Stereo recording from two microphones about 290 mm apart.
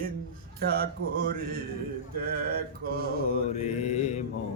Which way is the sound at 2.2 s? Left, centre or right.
Right.